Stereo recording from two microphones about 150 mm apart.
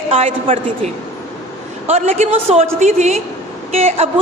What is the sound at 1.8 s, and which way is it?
A man's voice, 45° right (ahead or behind).